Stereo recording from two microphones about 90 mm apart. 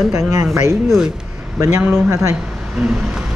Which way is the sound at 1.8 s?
20° right (ahead or behind).